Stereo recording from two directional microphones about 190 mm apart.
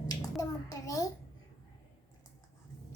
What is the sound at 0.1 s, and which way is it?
Speech, 20° left (ahead or behind).